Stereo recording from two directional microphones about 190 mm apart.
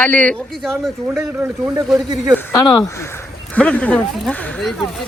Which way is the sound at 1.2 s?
15° right (ahead or behind).